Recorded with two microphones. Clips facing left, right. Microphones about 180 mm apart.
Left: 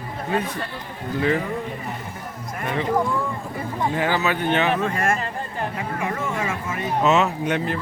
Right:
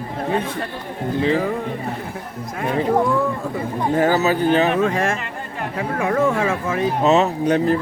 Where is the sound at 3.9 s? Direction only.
40° right (ahead or behind).